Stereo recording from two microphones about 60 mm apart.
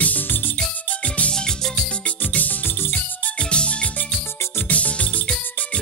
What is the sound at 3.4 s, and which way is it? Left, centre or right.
Music, centre.